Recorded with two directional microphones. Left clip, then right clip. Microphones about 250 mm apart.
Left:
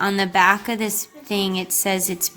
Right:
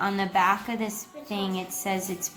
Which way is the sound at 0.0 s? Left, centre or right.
Left.